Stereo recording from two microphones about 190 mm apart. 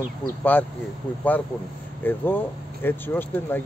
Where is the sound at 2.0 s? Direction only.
10° left (ahead or behind).